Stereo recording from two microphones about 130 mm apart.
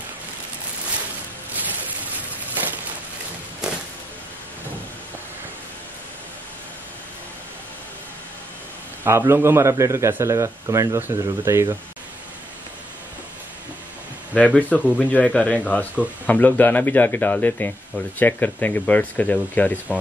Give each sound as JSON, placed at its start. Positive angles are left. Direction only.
{"t": 1.5, "sound": "a sound", "side_deg": -15}
{"t": 9.0, "sound": "a man's voice", "side_deg": -20}
{"t": 14.3, "sound": "speech", "side_deg": 10}